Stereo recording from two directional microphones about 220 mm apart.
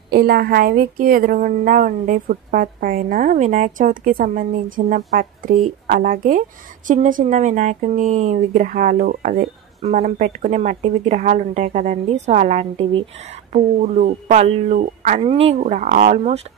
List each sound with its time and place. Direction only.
0.1 s speech: 45° right (ahead or behind)